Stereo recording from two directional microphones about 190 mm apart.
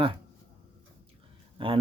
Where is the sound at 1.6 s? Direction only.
30° right (ahead or behind).